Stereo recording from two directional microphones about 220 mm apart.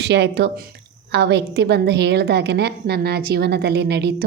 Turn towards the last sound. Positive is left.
turn(degrees=-50)  # may be behind; listen again after turning